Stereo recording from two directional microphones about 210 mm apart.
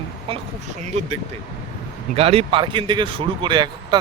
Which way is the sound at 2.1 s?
30° right (ahead or behind).